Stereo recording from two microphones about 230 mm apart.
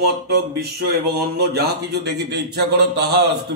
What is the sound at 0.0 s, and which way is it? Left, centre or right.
Speech, right.